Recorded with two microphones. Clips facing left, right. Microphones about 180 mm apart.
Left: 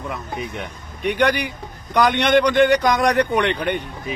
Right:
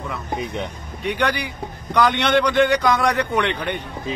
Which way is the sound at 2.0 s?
15° left (ahead or behind).